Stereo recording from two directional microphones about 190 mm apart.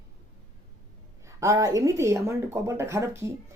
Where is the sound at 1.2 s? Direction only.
15° right (ahead or behind).